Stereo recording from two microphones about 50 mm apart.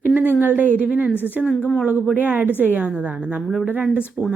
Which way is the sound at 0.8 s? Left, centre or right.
Right.